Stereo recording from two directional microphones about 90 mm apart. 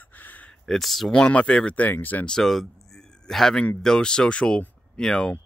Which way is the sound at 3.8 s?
10° left (ahead or behind).